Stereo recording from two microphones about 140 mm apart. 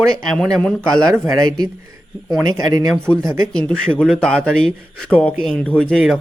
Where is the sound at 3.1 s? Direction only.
10° left (ahead or behind).